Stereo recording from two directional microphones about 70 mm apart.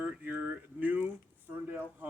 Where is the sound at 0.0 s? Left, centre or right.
Right.